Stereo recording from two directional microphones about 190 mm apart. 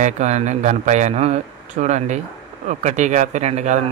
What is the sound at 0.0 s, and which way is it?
Speech, 40° right (ahead or behind).